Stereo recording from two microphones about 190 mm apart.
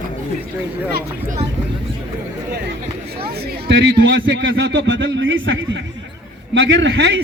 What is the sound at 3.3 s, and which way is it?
A man's voice, 65° right (ahead or behind).